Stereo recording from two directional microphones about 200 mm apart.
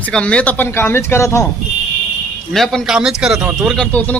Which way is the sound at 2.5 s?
Centre (ahead or behind).